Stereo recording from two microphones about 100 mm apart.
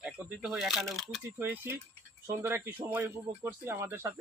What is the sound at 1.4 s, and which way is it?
Speech, 20° right (ahead or behind).